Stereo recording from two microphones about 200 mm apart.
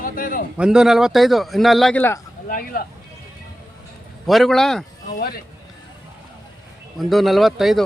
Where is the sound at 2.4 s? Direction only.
45° left (ahead or behind).